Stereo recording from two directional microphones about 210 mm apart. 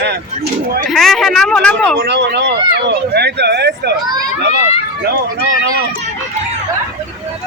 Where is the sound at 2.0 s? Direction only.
55° right (ahead or behind).